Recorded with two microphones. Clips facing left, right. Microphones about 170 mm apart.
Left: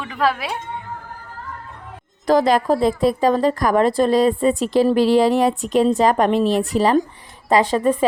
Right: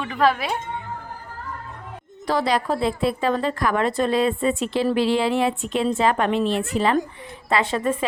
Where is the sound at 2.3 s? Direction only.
45° left (ahead or behind).